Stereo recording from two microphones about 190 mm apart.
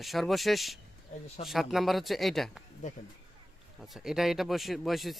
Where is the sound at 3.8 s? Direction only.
Centre (ahead or behind).